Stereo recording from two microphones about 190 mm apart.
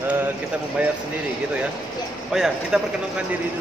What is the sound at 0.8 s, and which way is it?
Speech, 5° right (ahead or behind).